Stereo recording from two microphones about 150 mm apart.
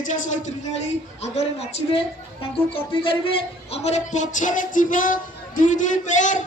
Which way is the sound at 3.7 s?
45° left (ahead or behind).